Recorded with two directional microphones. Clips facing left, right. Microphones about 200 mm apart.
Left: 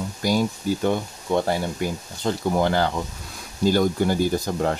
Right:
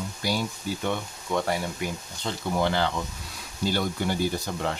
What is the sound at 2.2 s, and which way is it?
Speech, 45° left (ahead or behind).